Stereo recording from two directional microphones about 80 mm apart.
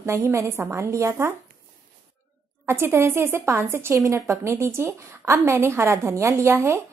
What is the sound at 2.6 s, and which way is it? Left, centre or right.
A woman's voice, right.